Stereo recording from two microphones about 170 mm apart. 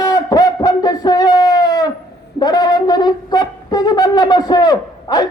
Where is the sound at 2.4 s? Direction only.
25° left (ahead or behind).